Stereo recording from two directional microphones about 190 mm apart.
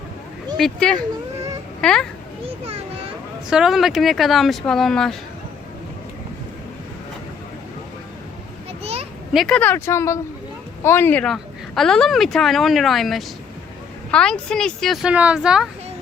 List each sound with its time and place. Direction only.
0.5 s speech: centre (ahead or behind)
3.5 s speech: centre (ahead or behind)
8.8 s a sound: 30° right (ahead or behind)
9.3 s speech: centre (ahead or behind)